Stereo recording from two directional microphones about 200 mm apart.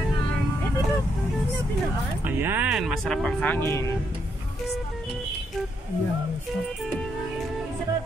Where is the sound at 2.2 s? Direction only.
10° right (ahead or behind); by 3.8 s 10° left (ahead or behind).